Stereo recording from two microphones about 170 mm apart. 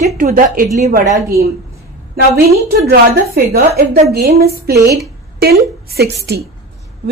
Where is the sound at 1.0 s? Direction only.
20° right (ahead or behind).